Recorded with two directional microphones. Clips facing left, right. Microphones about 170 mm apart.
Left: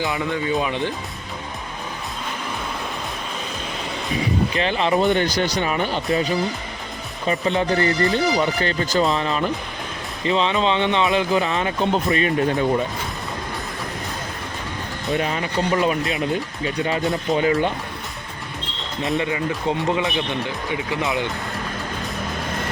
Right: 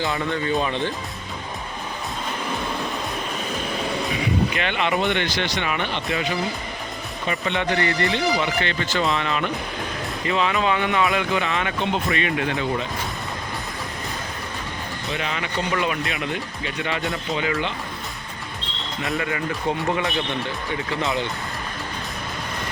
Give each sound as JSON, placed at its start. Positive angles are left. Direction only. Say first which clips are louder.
{"t": 0.5, "sound": "speech", "louder": "even", "side_deg": 10}
{"t": 4.1, "sound": "speech", "louder": "left 5 dB", "side_deg": 35}
{"t": 15.1, "sound": "speech", "louder": "left 5 dB", "side_deg": 40}
{"t": 19.1, "sound": "speech", "louder": "left 3 dB", "side_deg": 20}